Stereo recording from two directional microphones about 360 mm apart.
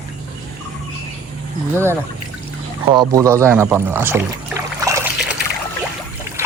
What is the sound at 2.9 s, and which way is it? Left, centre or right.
Speech, centre.